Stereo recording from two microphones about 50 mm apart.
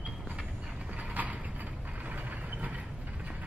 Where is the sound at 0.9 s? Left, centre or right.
Right.